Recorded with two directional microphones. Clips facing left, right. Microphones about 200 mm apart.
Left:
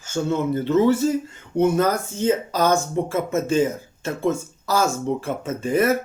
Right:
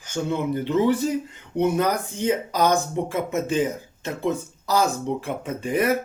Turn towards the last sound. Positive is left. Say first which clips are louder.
# left 3 dB
turn(degrees=-15)  # may be behind; listen again after turning